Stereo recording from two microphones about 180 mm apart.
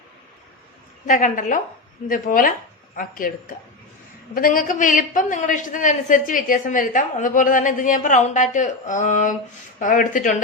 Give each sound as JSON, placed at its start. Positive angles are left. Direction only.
{"t": 1.0, "sound": "a man's voice", "side_deg": 45}
{"t": 4.4, "sound": "a man's voice", "side_deg": 50}